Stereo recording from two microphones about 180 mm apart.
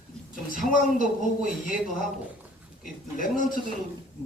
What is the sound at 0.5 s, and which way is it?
Speech, 50° left (ahead or behind).